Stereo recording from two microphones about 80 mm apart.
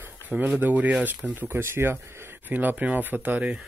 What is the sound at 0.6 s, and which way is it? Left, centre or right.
Speech, right.